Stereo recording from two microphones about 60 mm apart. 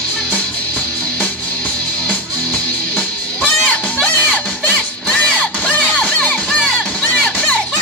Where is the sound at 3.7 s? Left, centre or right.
Left.